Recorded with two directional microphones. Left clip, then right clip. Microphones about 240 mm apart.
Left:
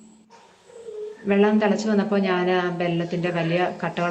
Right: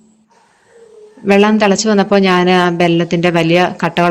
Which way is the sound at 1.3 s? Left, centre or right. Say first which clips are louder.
Right 9 dB; right.